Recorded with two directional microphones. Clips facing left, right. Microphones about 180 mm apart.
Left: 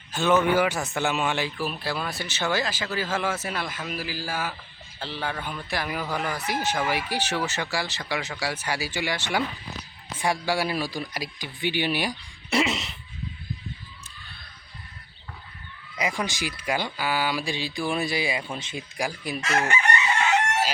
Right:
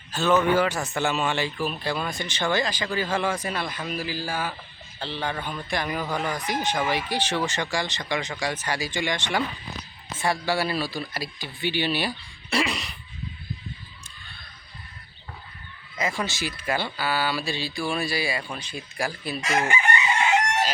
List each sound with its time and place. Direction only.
0.1 s a man's voice: 15° left (ahead or behind)
16.0 s a man's voice: 15° left (ahead or behind)